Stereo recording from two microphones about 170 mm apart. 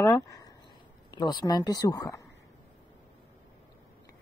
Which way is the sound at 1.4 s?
25° left (ahead or behind).